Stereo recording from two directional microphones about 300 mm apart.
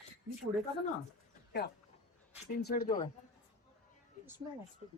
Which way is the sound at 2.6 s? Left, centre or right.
Left.